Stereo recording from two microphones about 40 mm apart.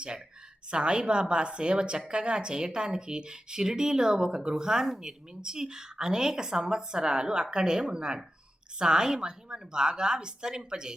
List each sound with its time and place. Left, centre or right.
0.7 s a woman's voice: right